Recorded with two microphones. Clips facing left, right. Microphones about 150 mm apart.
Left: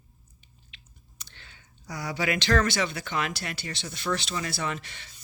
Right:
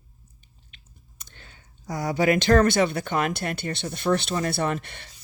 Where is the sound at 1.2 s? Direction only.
45° right (ahead or behind).